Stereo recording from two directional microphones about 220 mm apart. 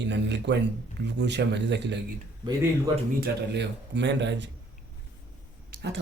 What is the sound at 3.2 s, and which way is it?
A man's voice, 50° right (ahead or behind).